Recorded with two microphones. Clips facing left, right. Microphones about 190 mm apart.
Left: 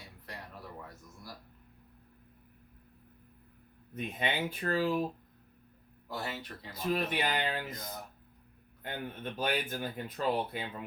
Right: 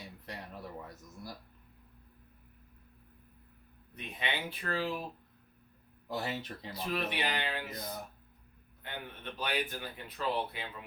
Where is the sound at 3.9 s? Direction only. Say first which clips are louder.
Left 4 dB; 45° left (ahead or behind).